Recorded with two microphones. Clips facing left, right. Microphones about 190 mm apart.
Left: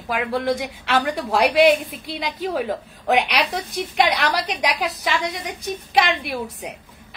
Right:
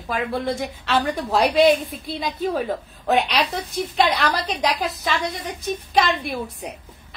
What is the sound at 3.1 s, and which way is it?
A woman's voice, 15° left (ahead or behind).